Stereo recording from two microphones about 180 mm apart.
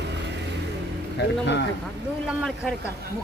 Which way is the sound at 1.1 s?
75° left (ahead or behind).